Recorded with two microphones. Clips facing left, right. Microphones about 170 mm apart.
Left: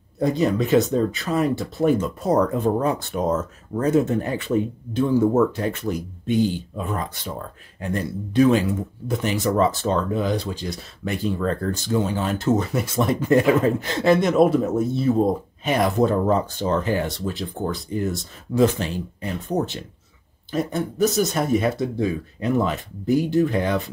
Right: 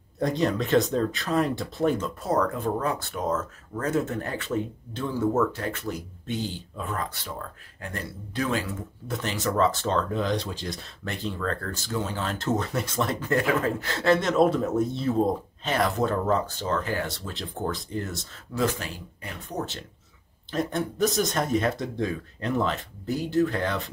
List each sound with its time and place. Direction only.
0.2 s speech: 5° left (ahead or behind)
20.5 s speech: 5° left (ahead or behind)